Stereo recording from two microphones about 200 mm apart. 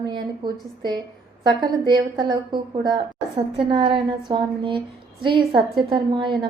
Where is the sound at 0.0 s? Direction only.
20° right (ahead or behind).